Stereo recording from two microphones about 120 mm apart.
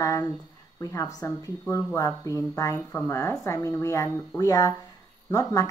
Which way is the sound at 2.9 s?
15° left (ahead or behind).